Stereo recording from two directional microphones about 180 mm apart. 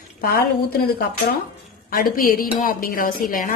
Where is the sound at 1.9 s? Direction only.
55° left (ahead or behind).